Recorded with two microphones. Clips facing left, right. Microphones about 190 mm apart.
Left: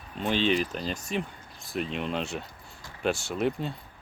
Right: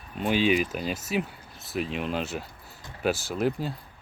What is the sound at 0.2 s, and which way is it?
Speech, 10° right (ahead or behind).